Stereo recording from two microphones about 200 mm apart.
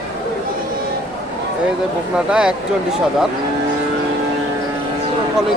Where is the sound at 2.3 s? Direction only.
5° right (ahead or behind).